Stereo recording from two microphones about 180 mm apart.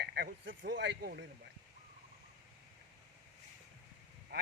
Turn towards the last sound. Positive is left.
turn(degrees=-65)  # may be behind; listen again after turning